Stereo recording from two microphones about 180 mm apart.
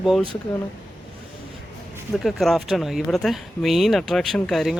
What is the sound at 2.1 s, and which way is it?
Speech, centre (ahead or behind).